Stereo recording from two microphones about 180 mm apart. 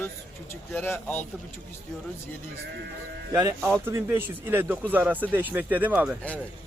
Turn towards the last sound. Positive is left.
turn(degrees=-10)  # may be behind; listen again after turning